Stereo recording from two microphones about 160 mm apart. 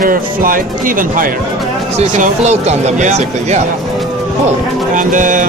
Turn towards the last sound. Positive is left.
turn(degrees=-55)  # may be behind; listen again after turning